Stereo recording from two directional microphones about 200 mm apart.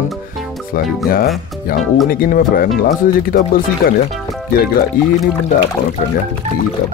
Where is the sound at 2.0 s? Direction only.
45° left (ahead or behind).